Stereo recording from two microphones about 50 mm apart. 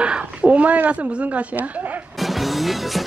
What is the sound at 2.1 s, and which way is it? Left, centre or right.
Music, centre.